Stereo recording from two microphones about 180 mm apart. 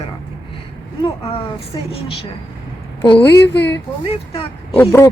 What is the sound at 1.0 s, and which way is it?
A woman's voice, 30° left (ahead or behind).